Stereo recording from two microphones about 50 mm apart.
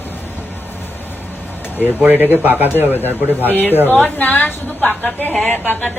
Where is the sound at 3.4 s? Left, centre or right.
Left.